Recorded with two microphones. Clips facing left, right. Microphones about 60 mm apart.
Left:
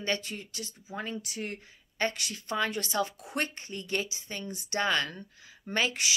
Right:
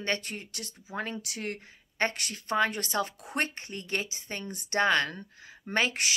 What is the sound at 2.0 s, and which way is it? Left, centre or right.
Speech, right.